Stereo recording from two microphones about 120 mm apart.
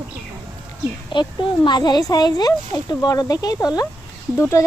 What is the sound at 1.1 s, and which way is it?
Speech, 40° left (ahead or behind).